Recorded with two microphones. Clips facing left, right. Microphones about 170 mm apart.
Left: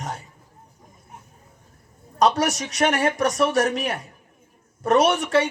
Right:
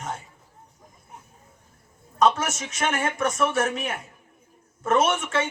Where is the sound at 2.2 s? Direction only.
35° left (ahead or behind).